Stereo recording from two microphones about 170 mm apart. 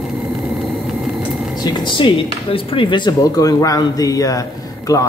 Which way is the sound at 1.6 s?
25° left (ahead or behind).